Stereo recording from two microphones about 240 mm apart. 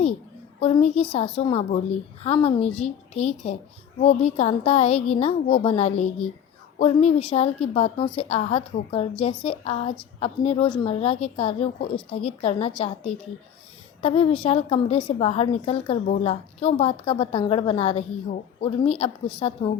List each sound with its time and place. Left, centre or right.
0.6 s a woman's voice: left